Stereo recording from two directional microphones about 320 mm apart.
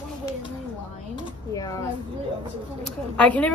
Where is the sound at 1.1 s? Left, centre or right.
Centre.